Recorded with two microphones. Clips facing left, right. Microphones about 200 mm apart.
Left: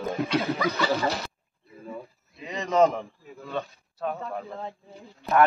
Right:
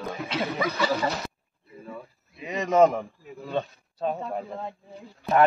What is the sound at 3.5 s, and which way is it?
A man's voice, 20° right (ahead or behind).